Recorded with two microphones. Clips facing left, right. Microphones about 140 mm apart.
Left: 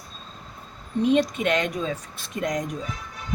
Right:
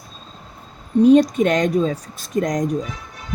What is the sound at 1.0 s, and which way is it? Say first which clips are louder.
Speech: right 8 dB; 40° right (ahead or behind).